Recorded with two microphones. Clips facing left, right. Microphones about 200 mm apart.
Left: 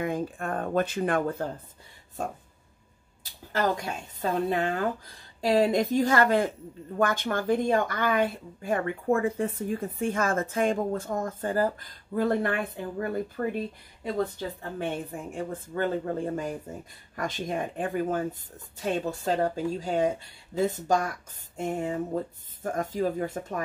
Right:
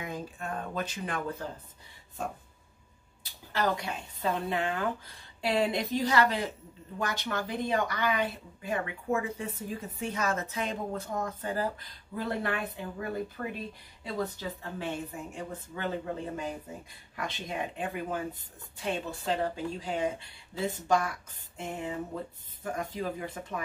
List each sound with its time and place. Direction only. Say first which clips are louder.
0.0 s speech: left 8 dB; 55° left (ahead or behind)
3.5 s a woman's voice: left 3 dB; 45° left (ahead or behind)
14.8 s a woman's voice: left 5 dB; 50° left (ahead or behind)